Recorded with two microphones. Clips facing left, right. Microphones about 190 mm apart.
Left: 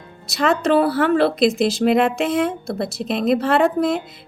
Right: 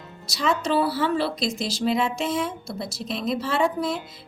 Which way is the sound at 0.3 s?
60° left (ahead or behind).